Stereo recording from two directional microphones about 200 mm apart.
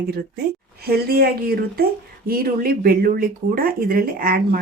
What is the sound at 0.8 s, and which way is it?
Speech, 50° right (ahead or behind).